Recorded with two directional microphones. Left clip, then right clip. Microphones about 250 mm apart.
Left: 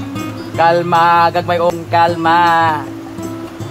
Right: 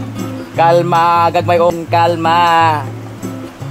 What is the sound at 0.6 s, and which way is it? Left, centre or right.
Music, right.